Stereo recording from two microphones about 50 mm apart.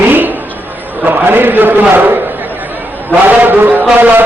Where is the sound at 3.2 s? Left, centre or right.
Right.